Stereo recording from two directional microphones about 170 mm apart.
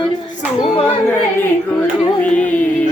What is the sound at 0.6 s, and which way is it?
Speech, 30° left (ahead or behind).